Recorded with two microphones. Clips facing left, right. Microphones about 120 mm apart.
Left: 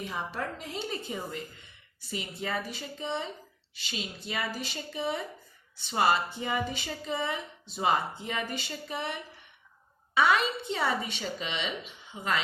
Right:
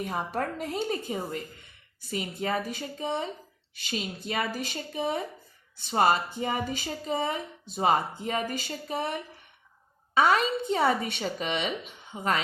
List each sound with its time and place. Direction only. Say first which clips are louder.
0.0 s speech: right 4 dB; 50° right (ahead or behind)
10.2 s speech: right 2 dB; 45° right (ahead or behind)